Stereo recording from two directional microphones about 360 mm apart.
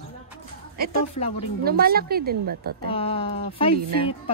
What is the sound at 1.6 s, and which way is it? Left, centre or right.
Speech, right.